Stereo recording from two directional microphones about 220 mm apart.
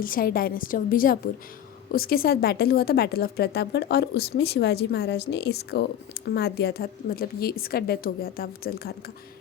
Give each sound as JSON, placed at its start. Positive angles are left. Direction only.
{"t": 0.0, "sound": "a woman's voice", "side_deg": 40}